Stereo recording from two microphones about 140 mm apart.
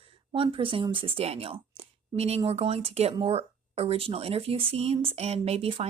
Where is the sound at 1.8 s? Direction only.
45° right (ahead or behind).